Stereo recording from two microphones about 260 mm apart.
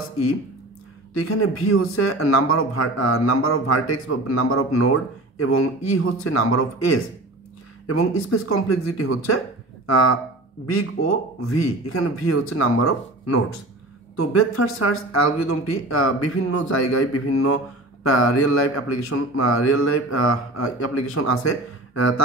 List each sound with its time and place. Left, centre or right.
1.1 s speech: left
5.9 s speech: left
10.7 s speech: left